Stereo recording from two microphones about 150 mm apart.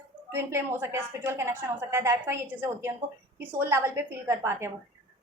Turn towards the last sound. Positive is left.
turn(degrees=-20)  # may be behind; listen again after turning